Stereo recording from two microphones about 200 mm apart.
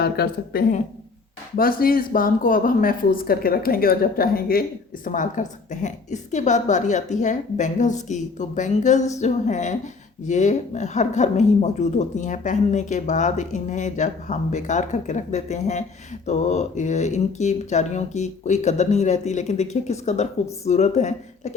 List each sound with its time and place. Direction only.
0.0 s speech: 50° left (ahead or behind); by 21.5 s 35° left (ahead or behind)